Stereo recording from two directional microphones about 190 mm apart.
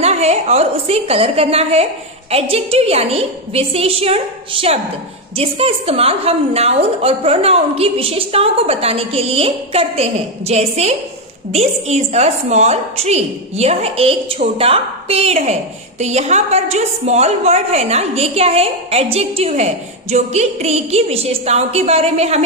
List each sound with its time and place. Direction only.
0.0 s a woman's voice: 35° right (ahead or behind)